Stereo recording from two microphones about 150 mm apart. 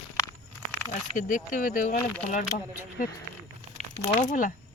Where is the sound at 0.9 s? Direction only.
60° left (ahead or behind).